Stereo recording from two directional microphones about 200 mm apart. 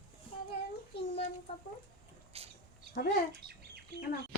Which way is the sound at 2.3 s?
30° right (ahead or behind).